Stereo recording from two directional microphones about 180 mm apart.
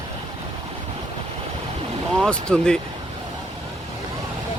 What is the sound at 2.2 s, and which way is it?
Speech, 5° left (ahead or behind).